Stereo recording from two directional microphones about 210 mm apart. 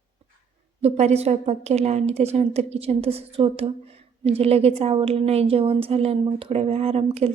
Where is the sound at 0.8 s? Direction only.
30° right (ahead or behind).